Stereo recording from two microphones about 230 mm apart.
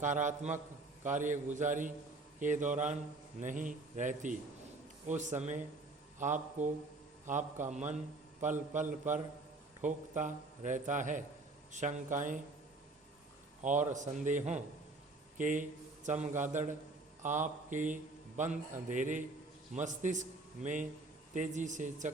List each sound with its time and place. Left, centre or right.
0.0 s a man's voice: right
13.6 s a man's voice: right